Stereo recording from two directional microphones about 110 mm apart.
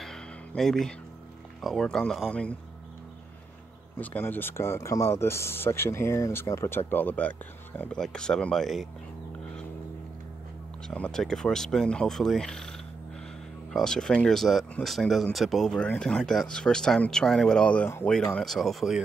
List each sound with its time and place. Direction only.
0.0 s a sound: 5° left (ahead or behind)
1.6 s speech: 5° left (ahead or behind)
4.0 s speech: 15° left (ahead or behind)
8.0 s speech: 5° left (ahead or behind)
10.9 s speech: 10° left (ahead or behind)
13.7 s speech: 5° left (ahead or behind)